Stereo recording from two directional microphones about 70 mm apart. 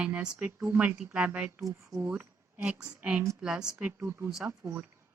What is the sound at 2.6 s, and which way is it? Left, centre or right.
Speech, centre.